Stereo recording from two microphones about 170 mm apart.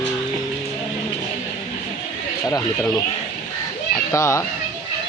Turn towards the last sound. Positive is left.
turn(degrees=20)  # may be behind; listen again after turning